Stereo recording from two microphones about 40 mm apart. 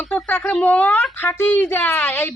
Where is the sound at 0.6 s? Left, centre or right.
Left.